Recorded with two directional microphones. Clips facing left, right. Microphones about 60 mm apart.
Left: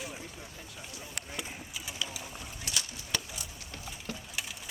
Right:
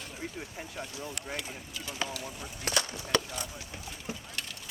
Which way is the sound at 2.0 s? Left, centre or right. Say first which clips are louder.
Right 5 dB; right.